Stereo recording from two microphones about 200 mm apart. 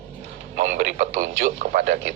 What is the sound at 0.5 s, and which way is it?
Speech, 40° right (ahead or behind).